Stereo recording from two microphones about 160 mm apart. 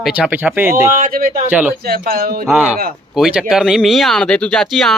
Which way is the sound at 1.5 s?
10° right (ahead or behind).